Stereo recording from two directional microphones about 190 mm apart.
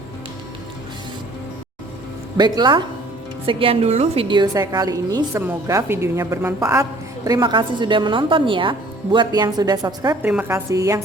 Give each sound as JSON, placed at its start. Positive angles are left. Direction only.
{"t": 2.4, "sound": "a woman's voice", "side_deg": -25}